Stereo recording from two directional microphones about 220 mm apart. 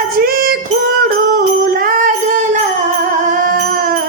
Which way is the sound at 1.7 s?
40° right (ahead or behind).